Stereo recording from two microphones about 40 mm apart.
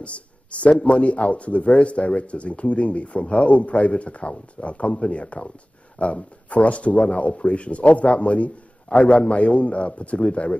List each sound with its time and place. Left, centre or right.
0.0 s a man's voice: left